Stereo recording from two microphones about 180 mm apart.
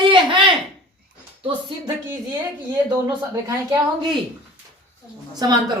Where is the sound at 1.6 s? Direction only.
20° right (ahead or behind).